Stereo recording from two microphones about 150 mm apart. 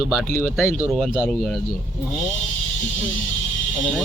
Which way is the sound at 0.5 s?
5° right (ahead or behind).